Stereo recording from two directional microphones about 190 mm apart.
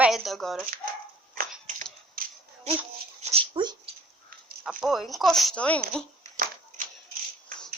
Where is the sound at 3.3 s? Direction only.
25° right (ahead or behind).